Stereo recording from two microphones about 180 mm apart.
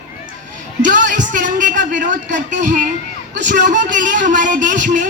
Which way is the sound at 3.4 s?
45° right (ahead or behind).